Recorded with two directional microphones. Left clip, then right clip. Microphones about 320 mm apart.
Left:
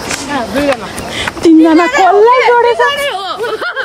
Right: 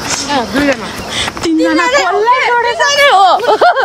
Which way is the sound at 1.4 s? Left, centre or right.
Centre.